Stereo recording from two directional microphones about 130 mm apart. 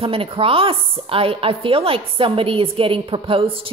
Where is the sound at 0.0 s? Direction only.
45° right (ahead or behind).